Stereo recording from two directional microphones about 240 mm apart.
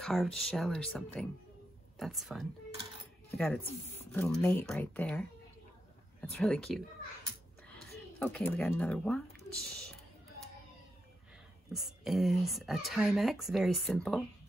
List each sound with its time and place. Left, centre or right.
0.0 s speech: centre
6.2 s speech: centre
8.2 s speech: centre
11.7 s speech: centre